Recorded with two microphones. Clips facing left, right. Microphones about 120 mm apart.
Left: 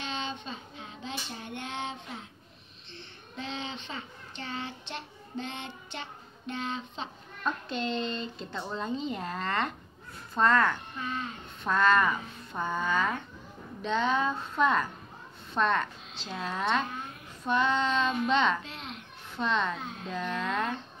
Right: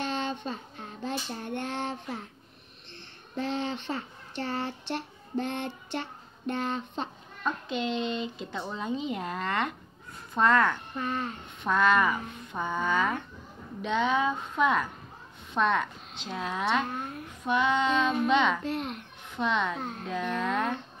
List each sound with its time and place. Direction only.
0.0 s female singing: 55° right (ahead or behind)
3.3 s speech: 60° right (ahead or behind)
7.4 s speech: 10° right (ahead or behind)
11.0 s speech: 50° right (ahead or behind)
11.6 s speech: 10° right (ahead or behind)
16.9 s a woman's voice: 50° right (ahead or behind)
17.5 s speech: 10° right (ahead or behind)
18.6 s speech: 50° right (ahead or behind)
19.3 s speech: 10° right (ahead or behind)
19.8 s speech: 55° right (ahead or behind)
20.1 s speech: 10° right (ahead or behind)